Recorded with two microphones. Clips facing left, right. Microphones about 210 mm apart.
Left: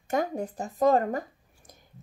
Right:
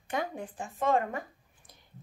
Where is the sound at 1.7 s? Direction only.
45° left (ahead or behind).